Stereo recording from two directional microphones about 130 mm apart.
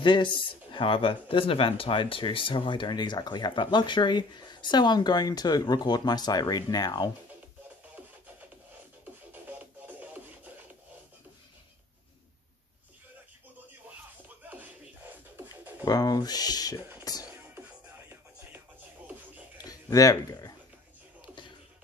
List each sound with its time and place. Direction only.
0.0 s speech: 40° left (ahead or behind)
9.3 s music: 15° right (ahead or behind)
14.5 s beatboxing: 15° right (ahead or behind)
15.8 s speech: 30° left (ahead or behind)
17.0 s music: 30° left (ahead or behind)
19.6 s a sound: 30° left (ahead or behind)